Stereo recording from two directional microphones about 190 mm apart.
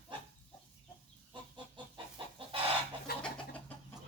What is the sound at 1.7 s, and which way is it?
Chicken, 25° right (ahead or behind).